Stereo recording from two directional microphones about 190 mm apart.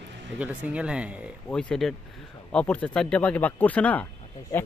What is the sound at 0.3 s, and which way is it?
Speech, 5° right (ahead or behind).